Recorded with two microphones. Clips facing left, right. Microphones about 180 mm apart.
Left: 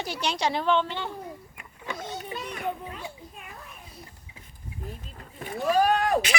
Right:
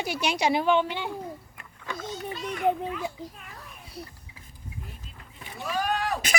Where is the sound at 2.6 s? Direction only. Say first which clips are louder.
Right 11 dB; 75° right (ahead or behind).